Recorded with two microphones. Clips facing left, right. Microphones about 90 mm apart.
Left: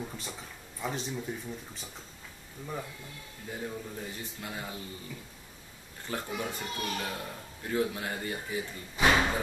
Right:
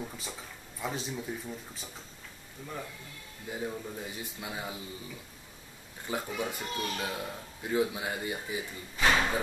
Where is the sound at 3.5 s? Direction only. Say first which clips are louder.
Right 2 dB; 10° right (ahead or behind).